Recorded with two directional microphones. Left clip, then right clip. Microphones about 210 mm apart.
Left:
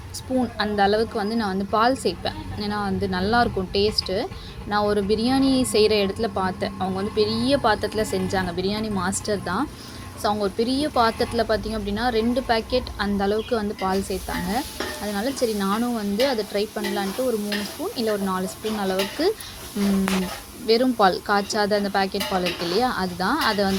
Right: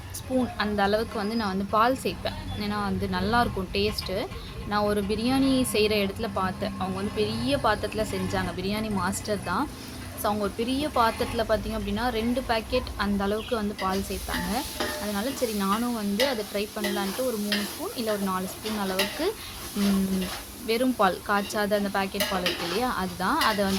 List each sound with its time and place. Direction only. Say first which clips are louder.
0.6 s speech: left 6 dB; 15° left (ahead or behind)
20.7 s speech: left 5 dB; 15° left (ahead or behind)